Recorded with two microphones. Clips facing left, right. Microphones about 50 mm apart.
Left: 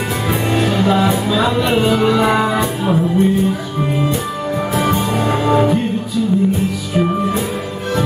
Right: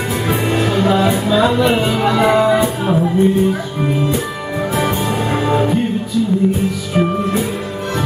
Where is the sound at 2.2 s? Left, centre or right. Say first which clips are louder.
Right 3 dB; centre.